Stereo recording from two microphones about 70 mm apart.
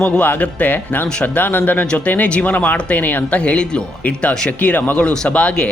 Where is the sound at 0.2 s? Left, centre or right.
Left.